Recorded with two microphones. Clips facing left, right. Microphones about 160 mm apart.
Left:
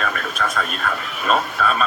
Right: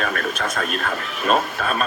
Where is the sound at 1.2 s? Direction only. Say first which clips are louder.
Left 1 dB; 50° right (ahead or behind).